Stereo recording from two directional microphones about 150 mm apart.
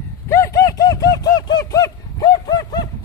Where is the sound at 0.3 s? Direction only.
20° left (ahead or behind).